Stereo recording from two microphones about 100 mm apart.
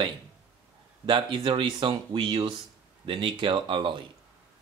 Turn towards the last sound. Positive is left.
turn(degrees=-55)  # may be behind; listen again after turning